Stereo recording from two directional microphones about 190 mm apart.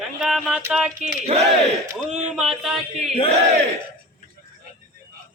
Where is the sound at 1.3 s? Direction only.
30° right (ahead or behind).